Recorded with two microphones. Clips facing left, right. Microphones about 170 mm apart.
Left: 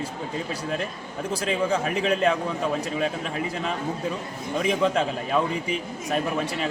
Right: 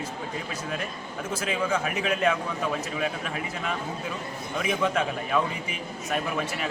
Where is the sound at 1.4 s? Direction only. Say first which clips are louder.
Left 3 dB; 30° left (ahead or behind).